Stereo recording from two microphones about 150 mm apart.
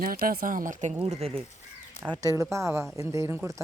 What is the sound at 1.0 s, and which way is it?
Speech, 40° right (ahead or behind).